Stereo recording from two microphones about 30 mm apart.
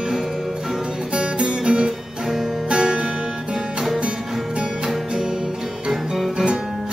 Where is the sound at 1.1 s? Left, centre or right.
Right.